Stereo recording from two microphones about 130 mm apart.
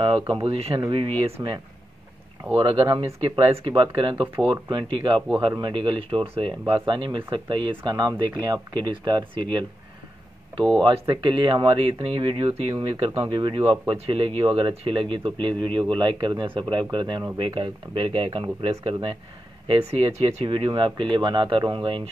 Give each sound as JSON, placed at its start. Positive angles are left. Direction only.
{"t": 0.0, "sound": "speech", "side_deg": -40}
{"t": 0.9, "sound": "speech", "side_deg": -35}
{"t": 10.8, "sound": "speech", "side_deg": -40}
{"t": 20.4, "sound": "speech", "side_deg": -40}